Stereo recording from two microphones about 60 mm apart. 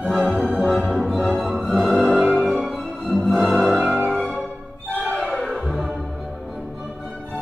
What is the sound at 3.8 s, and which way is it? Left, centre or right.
Music, centre.